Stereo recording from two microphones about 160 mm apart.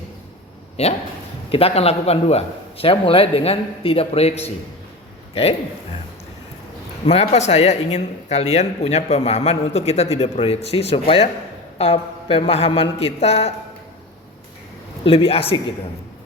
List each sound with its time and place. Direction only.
0.8 s speech: 40° left (ahead or behind)
7.0 s speech: 40° left (ahead or behind)
15.0 s speech: 35° left (ahead or behind)